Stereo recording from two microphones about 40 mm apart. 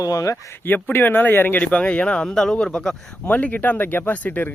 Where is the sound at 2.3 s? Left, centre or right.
Centre.